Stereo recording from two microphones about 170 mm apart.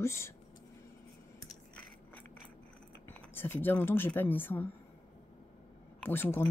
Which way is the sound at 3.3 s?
15° left (ahead or behind).